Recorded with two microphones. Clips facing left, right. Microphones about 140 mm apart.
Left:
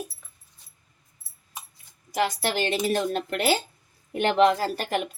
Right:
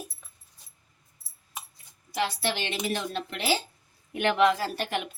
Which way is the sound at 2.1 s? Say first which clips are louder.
Left 4 dB; 45° left (ahead or behind).